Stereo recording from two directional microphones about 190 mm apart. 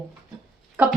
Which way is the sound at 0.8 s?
5° right (ahead or behind).